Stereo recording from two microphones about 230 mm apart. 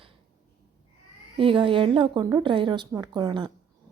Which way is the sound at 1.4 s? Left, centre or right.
Right.